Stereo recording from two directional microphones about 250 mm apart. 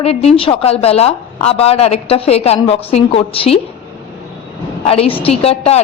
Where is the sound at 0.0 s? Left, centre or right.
Left.